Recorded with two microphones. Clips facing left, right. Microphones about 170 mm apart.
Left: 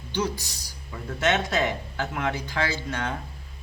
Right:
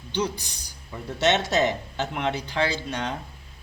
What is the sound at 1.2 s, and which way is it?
Speech, 40° right (ahead or behind).